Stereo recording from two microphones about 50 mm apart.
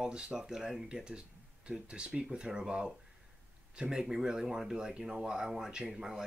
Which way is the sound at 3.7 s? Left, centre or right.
Centre.